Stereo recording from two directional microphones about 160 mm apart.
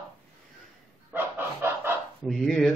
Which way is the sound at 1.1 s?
15° right (ahead or behind).